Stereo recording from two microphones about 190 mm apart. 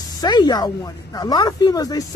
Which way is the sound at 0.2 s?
20° left (ahead or behind).